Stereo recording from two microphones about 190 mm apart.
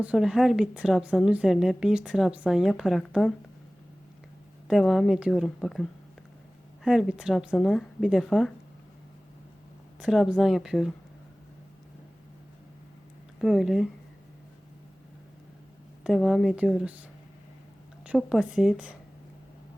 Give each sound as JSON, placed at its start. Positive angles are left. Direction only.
{"t": 0.0, "sound": "a woman's voice", "side_deg": -5}
{"t": 4.7, "sound": "a woman's voice", "side_deg": 0}
{"t": 10.0, "sound": "a woman's voice", "side_deg": -5}
{"t": 13.4, "sound": "a woman's voice", "side_deg": 0}
{"t": 16.0, "sound": "a woman's voice", "side_deg": 0}
{"t": 18.0, "sound": "a woman's voice", "side_deg": -5}